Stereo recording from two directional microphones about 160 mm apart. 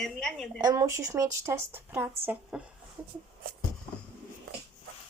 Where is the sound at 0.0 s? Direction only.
5° left (ahead or behind).